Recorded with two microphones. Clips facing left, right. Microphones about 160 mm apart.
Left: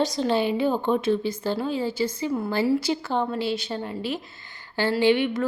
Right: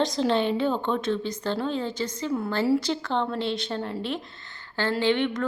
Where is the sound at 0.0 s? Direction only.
Centre (ahead or behind).